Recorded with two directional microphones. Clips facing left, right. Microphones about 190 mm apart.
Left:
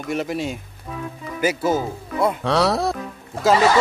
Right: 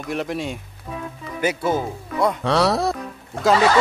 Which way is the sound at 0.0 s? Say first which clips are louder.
Left 1 dB; centre (ahead or behind).